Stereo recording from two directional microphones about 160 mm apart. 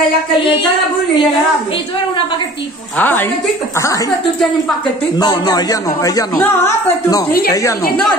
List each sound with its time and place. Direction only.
3.0 s a woman's voice: 10° left (ahead or behind)
5.1 s speech: 25° left (ahead or behind)